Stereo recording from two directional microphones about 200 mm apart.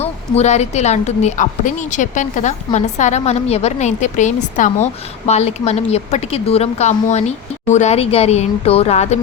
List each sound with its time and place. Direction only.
0.0 s a woman's voice: 35° left (ahead or behind)